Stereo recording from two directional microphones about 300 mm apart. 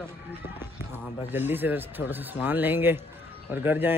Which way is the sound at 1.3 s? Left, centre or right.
Centre.